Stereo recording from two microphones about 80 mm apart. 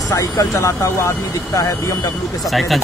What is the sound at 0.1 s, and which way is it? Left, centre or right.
Speech, left.